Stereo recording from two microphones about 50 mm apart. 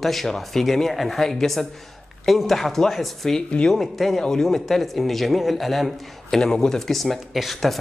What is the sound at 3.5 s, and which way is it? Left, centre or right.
Speech, centre.